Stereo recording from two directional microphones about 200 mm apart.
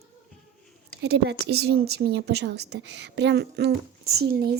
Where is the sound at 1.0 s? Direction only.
55° right (ahead or behind).